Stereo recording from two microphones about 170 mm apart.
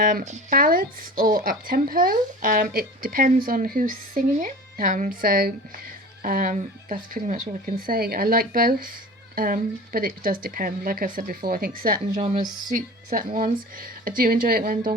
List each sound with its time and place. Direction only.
0.0 s a woman's voice: 55° right (ahead or behind)